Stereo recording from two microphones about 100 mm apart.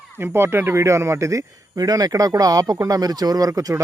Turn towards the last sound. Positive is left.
turn(degrees=-35)  # may be behind; listen again after turning